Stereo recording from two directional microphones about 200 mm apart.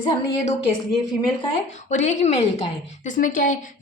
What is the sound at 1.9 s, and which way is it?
A woman's voice, 35° left (ahead or behind).